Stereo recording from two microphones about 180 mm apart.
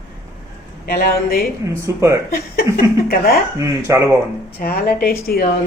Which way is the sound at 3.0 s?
55° left (ahead or behind).